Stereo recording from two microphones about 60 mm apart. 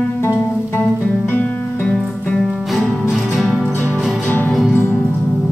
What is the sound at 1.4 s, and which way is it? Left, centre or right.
Music, left.